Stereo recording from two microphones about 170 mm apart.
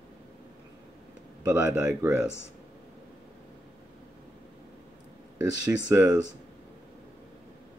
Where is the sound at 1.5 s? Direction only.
10° right (ahead or behind).